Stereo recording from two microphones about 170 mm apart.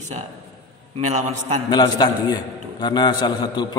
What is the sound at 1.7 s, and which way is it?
A man's voice, 25° left (ahead or behind).